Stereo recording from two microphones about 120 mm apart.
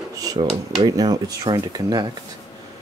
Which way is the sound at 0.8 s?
30° right (ahead or behind).